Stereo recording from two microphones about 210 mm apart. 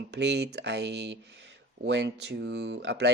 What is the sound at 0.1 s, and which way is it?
Speech, 55° right (ahead or behind).